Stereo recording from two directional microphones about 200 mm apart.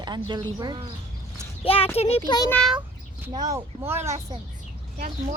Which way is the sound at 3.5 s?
15° right (ahead or behind).